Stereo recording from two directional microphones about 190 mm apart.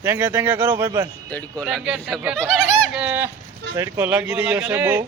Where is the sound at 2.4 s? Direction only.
5° left (ahead or behind).